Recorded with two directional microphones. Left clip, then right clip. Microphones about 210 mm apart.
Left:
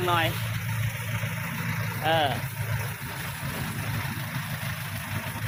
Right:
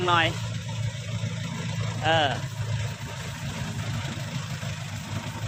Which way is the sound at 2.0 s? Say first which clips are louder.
Right 1 dB; 5° right (ahead or behind).